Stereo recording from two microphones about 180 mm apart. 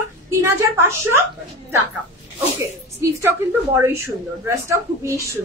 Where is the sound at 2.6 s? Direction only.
15° right (ahead or behind).